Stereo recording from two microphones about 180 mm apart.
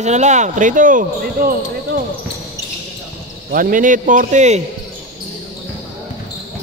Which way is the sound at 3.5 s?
50° right (ahead or behind).